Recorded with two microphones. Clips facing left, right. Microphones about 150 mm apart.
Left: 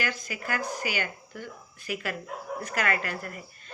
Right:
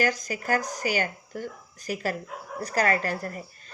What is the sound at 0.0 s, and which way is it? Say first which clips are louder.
A woman's voice: right 6 dB; 40° right (ahead or behind).